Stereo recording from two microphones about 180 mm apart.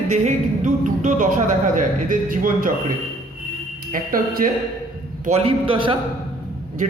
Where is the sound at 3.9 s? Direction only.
50° right (ahead or behind).